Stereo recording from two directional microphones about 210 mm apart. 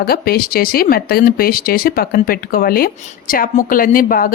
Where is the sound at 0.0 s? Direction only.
45° left (ahead or behind).